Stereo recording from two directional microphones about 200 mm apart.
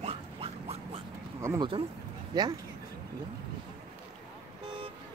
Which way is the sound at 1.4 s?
20° right (ahead or behind).